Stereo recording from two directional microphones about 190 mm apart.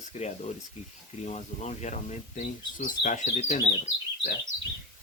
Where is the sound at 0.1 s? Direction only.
35° left (ahead or behind).